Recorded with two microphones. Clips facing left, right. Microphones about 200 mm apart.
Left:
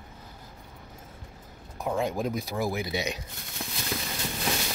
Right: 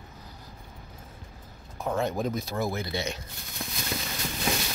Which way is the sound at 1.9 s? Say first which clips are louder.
Even; 10° left (ahead or behind).